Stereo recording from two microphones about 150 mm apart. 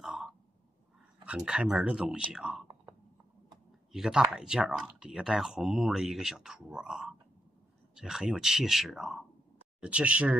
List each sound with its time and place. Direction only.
0.0 s a sound: centre (ahead or behind)
1.2 s speech: 5° right (ahead or behind)
3.9 s speech: 5° right (ahead or behind)